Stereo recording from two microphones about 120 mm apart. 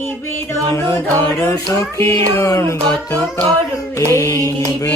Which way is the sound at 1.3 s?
25° left (ahead or behind).